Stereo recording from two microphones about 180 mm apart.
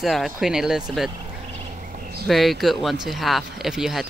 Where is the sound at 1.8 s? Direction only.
50° right (ahead or behind).